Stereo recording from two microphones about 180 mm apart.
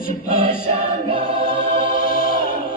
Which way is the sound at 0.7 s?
30° right (ahead or behind).